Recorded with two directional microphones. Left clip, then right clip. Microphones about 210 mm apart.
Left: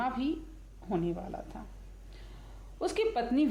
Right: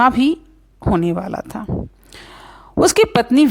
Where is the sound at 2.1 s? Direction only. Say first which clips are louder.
Right 18 dB; 50° right (ahead or behind).